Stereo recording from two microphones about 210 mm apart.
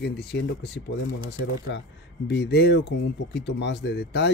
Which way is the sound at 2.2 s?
55° left (ahead or behind).